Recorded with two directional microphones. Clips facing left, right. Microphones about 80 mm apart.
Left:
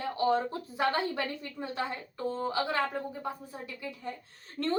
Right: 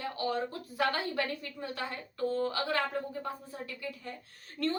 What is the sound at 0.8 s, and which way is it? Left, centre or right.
A woman's voice, left.